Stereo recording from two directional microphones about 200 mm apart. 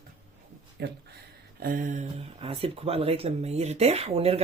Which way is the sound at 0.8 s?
50° right (ahead or behind).